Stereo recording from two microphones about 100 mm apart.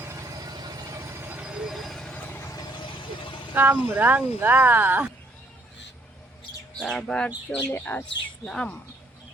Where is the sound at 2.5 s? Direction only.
50° left (ahead or behind).